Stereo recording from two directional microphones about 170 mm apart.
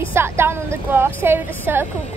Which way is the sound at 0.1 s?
15° right (ahead or behind).